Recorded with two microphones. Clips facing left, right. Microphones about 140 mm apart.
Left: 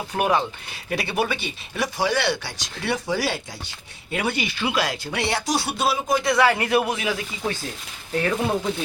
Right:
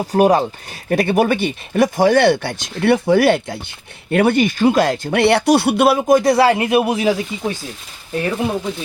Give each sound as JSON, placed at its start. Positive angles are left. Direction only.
{"t": 0.0, "sound": "speech", "side_deg": -40}
{"t": 0.9, "sound": "speech", "side_deg": -50}
{"t": 6.6, "sound": "speech", "side_deg": -20}
{"t": 6.9, "sound": "speech", "side_deg": -30}
{"t": 8.1, "sound": "speech", "side_deg": -15}